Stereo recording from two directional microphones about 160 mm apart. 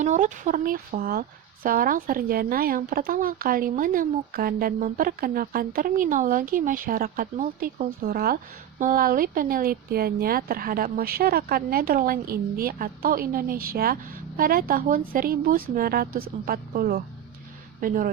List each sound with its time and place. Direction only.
0.0 s speech: 50° right (ahead or behind)